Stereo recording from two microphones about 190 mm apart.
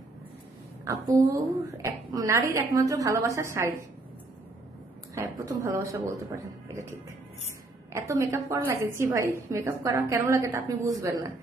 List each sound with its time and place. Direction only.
0.8 s a woman's voice: 20° right (ahead or behind)
5.1 s a woman's voice: 15° right (ahead or behind)
7.9 s a woman's voice: 15° right (ahead or behind)